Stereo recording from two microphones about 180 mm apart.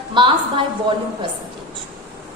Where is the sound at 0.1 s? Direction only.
25° right (ahead or behind).